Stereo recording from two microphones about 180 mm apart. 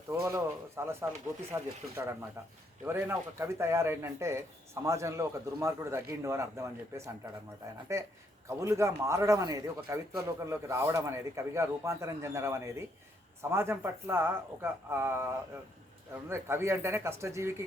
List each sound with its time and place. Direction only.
0.1 s a man's voice: 15° right (ahead or behind)
16.3 s a man's voice: 15° right (ahead or behind)